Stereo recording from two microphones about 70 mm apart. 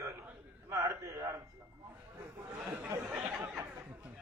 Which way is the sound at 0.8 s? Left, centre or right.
Right.